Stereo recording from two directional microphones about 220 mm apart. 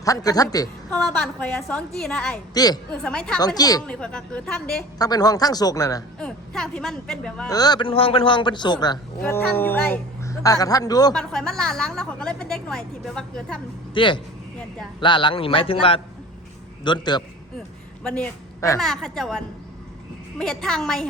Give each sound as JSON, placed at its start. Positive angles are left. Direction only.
{"t": 0.0, "sound": "a woman's voice", "side_deg": 15}
{"t": 0.9, "sound": "a woman's voice", "side_deg": 5}
{"t": 3.4, "sound": "a woman's voice", "side_deg": 15}
{"t": 3.8, "sound": "a woman's voice", "side_deg": 5}
{"t": 4.9, "sound": "a woman's voice", "side_deg": 15}
{"t": 6.1, "sound": "a woman's voice", "side_deg": 5}
{"t": 7.4, "sound": "a man's voice", "side_deg": 15}
{"t": 11.1, "sound": "a woman's voice", "side_deg": 5}
{"t": 13.9, "sound": "a man's voice", "side_deg": 20}
{"t": 18.0, "sound": "a woman's voice", "side_deg": 5}
{"t": 20.4, "sound": "a woman's voice", "side_deg": 0}